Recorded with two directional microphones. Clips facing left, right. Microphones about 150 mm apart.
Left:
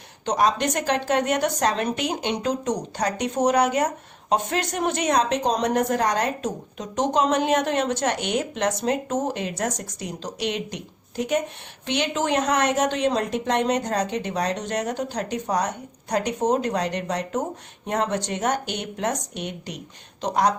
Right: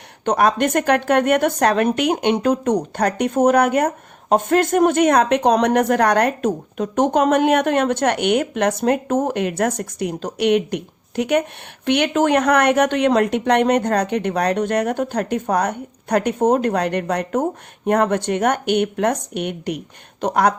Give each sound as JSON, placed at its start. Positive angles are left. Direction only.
{"t": 0.3, "sound": "speech", "side_deg": -55}